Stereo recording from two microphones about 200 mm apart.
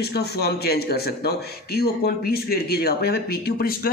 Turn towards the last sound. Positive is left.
turn(degrees=50)  # may be behind; listen again after turning